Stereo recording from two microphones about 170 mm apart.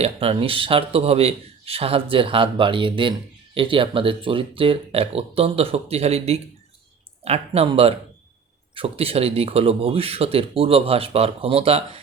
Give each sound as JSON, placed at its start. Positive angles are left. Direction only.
{"t": 0.0, "sound": "a man's voice", "side_deg": -35}